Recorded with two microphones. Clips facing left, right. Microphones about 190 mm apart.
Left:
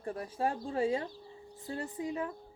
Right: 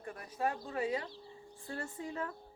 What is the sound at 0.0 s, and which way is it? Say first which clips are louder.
A woman's voice: left 3 dB; 30° left (ahead or behind).